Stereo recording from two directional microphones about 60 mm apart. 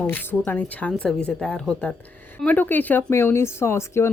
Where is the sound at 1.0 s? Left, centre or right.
Centre.